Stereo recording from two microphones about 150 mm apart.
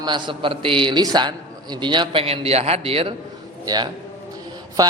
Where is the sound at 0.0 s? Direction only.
30° right (ahead or behind).